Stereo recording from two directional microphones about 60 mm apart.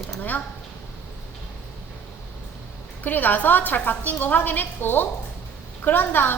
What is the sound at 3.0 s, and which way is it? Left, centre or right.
A woman's voice, left.